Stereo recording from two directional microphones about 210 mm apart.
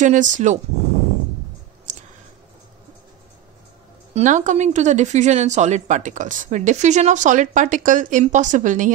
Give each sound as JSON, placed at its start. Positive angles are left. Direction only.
{"t": 0.0, "sound": "speech", "side_deg": -35}
{"t": 4.1, "sound": "speech", "side_deg": -35}